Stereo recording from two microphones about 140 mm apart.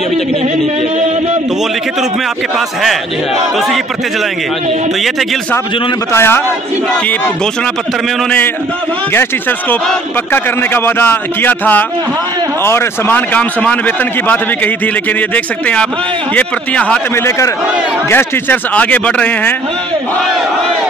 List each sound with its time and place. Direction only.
6.1 s a man's voice: 15° left (ahead or behind)
9.1 s a man's voice: 15° left (ahead or behind)